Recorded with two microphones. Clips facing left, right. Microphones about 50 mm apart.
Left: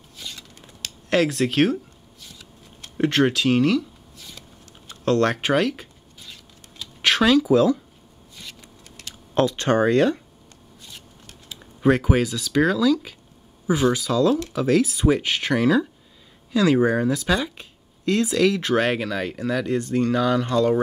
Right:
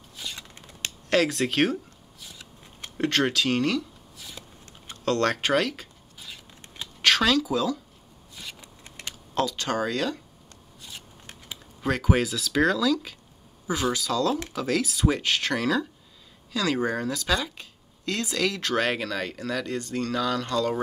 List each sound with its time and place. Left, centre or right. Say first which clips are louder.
0.1 s scissors: even; centre
1.1 s a sound: left 3 dB; centre
3.0 s speech: left 4 dB; centre
5.0 s speech: left 4 dB; centre
7.0 s a sound: left 4 dB; centre
7.5 s speech: left 9 dB; left
8.8 s typing: right 3 dB; right
9.3 s speech: left 7 dB; left
10.8 s a sound: right 1 dB; centre
11.8 s speech: left 9 dB; centre
12.1 s speech: left 3 dB; centre